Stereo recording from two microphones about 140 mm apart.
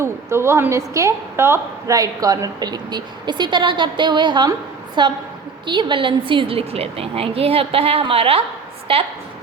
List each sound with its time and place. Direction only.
0.0 s a woman's voice: 20° right (ahead or behind); by 9.0 s 40° right (ahead or behind)